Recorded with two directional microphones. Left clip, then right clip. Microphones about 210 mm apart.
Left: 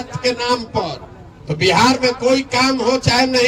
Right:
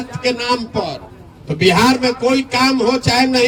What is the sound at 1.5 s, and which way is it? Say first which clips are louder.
A man's voice: right 1 dB; centre (ahead or behind).